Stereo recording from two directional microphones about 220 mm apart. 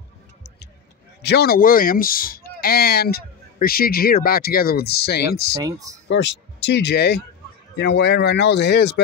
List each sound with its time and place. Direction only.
1.2 s speech: 45° left (ahead or behind)
5.5 s speech: 15° right (ahead or behind)
6.0 s speech: 50° left (ahead or behind)